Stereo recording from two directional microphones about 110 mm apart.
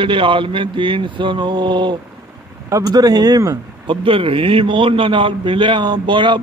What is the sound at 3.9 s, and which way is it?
A man's voice, 50° right (ahead or behind).